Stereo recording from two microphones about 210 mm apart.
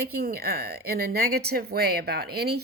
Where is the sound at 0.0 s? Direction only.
45° right (ahead or behind).